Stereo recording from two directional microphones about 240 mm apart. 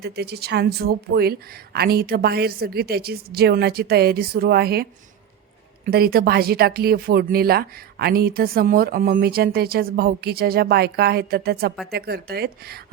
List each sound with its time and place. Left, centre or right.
0.0 s speech: right